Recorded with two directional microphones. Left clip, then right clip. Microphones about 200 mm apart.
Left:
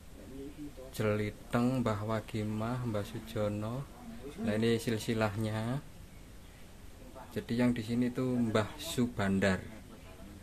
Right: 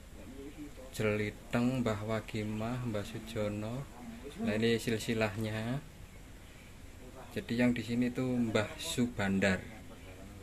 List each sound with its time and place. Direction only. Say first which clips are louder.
0.9 s a man's voice: even; 15° left (ahead or behind)
7.3 s a man's voice: even; 15° left (ahead or behind)